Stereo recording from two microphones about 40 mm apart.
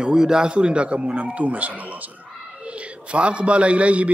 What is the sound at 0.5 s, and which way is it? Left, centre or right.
A man's voice, right.